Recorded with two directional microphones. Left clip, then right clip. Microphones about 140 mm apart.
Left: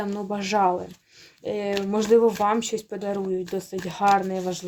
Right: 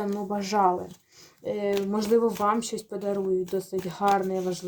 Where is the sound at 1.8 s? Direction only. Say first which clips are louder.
Left 6 dB; 40° left (ahead or behind).